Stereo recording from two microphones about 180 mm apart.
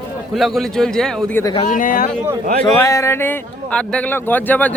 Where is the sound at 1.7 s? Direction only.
50° left (ahead or behind).